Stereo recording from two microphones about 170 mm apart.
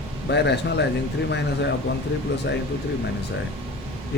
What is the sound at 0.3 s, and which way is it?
Speech, 90° left.